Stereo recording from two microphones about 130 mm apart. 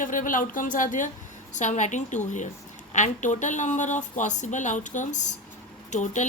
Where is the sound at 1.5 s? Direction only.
65° left (ahead or behind).